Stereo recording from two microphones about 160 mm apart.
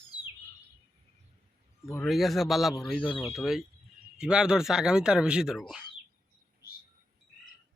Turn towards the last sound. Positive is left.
turn(degrees=0)  # may be behind; listen again after turning